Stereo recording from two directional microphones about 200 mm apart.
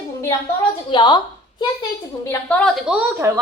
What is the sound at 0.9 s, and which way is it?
Speech, 20° left (ahead or behind).